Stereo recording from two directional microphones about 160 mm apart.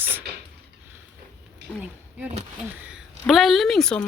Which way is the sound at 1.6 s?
90° right.